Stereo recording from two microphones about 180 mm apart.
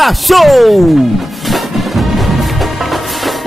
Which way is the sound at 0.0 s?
Centre (ahead or behind).